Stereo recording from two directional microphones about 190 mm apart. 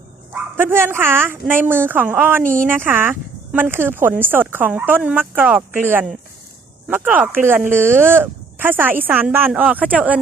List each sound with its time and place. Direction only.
0.3 s speech: 10° right (ahead or behind)
2.4 s speech: 45° right (ahead or behind)
2.7 s speech: 10° right (ahead or behind)